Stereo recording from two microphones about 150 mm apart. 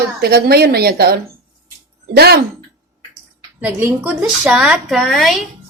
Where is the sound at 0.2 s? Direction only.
90° right.